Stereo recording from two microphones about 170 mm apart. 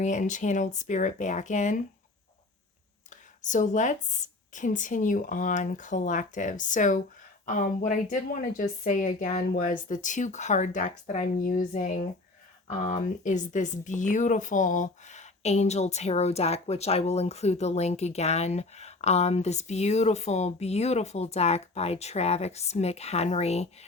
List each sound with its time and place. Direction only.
0.0 s a woman's voice: 45° left (ahead or behind)
3.1 s a woman's voice: 45° left (ahead or behind)